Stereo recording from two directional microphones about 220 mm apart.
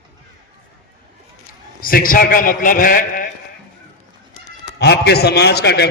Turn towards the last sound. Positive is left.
turn(degrees=50)  # may be behind; listen again after turning